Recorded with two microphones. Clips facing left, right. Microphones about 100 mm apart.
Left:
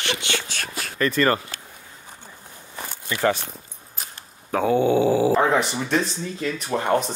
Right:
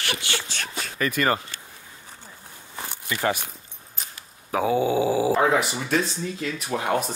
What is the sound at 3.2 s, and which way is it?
Speech, 15° right (ahead or behind).